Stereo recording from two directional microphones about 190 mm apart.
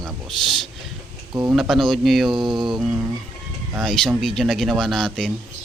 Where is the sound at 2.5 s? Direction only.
25° right (ahead or behind).